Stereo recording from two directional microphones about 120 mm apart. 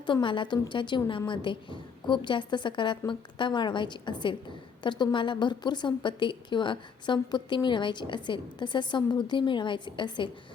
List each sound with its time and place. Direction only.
0.0 s a woman's voice: 40° left (ahead or behind)